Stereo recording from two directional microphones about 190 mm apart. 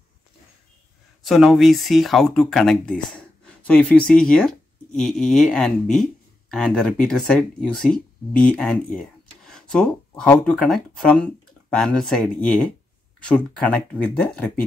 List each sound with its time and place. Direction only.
1.2 s speech: centre (ahead or behind)